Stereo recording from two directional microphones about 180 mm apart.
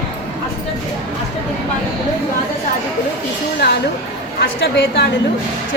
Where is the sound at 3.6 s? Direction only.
70° left (ahead or behind).